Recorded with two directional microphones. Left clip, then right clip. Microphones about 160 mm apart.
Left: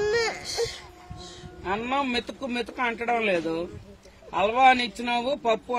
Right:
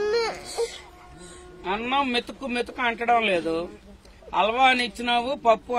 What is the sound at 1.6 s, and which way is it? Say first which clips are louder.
Speech: right 2 dB; 15° left (ahead or behind).